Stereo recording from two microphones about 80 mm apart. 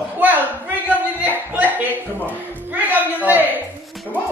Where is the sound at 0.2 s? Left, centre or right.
Right.